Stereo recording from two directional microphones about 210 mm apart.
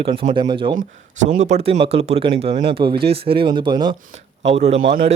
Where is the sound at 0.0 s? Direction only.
25° right (ahead or behind).